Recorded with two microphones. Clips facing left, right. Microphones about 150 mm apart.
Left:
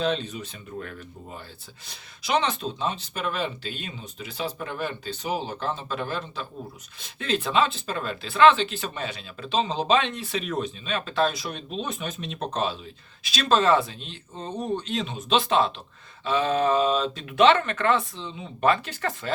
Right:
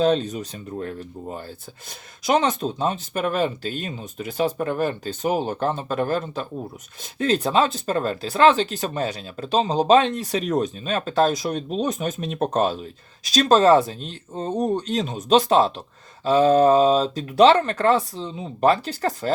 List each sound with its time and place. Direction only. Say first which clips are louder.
0.0 s speech: right 7 dB; 40° right (ahead or behind)